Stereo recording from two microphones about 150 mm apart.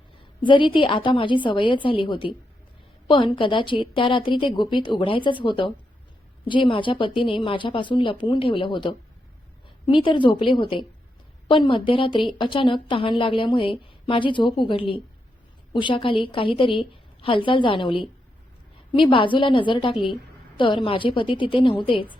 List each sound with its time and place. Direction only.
0.4 s a woman's voice: 35° left (ahead or behind)